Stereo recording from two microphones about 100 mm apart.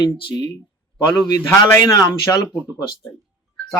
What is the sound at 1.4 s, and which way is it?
Speech, 30° left (ahead or behind).